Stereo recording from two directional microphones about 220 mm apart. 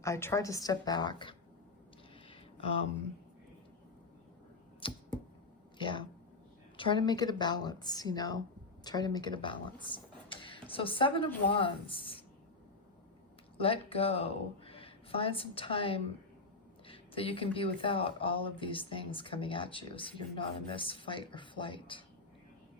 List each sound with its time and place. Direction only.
0.0 s a woman's voice: 10° left (ahead or behind)
4.8 s a sound: 25° left (ahead or behind)
6.7 s speech: 20° left (ahead or behind)
13.6 s speech: 25° left (ahead or behind)